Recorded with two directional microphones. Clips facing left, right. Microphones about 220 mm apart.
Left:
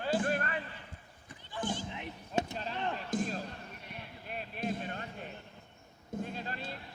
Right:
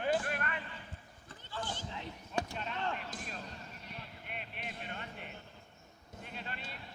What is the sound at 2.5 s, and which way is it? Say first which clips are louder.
Speech: left 2 dB; 35° left (ahead or behind).